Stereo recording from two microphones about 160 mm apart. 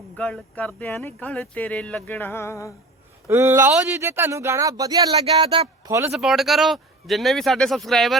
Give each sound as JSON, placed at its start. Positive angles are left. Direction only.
{"t": 0.2, "sound": "speech", "side_deg": 10}
{"t": 3.2, "sound": "speech", "side_deg": -15}
{"t": 6.1, "sound": "speech", "side_deg": 0}